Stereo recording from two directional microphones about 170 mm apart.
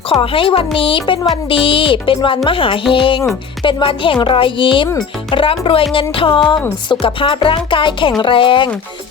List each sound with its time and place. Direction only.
0.1 s speech: 30° left (ahead or behind)